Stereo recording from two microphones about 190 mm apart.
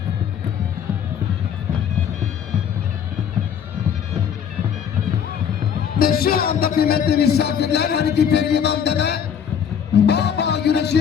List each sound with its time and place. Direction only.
6.0 s music: 50° left (ahead or behind)